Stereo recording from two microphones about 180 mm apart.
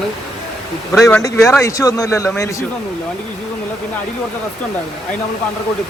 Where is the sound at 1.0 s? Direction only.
15° left (ahead or behind).